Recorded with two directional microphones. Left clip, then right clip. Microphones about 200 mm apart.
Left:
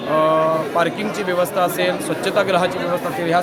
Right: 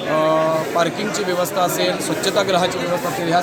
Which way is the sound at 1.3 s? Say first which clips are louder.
Left 2 dB; 5° left (ahead or behind).